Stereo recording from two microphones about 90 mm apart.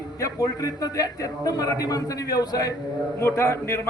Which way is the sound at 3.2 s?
30° left (ahead or behind).